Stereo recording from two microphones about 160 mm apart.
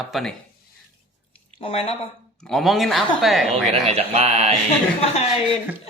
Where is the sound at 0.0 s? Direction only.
Centre (ahead or behind).